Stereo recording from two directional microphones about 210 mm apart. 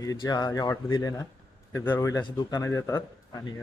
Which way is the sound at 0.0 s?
20° left (ahead or behind).